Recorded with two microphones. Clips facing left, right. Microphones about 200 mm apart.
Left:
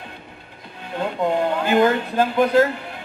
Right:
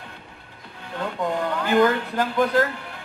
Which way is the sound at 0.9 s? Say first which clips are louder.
Left 4 dB; 20° left (ahead or behind).